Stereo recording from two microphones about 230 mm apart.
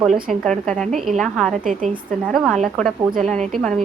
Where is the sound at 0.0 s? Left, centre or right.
Centre.